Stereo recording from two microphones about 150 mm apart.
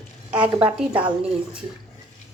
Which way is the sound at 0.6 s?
10° right (ahead or behind).